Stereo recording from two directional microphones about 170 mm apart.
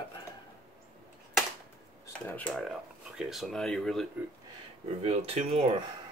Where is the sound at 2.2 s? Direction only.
10° left (ahead or behind).